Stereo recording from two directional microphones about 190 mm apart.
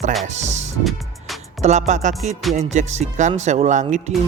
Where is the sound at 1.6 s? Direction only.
40° right (ahead or behind).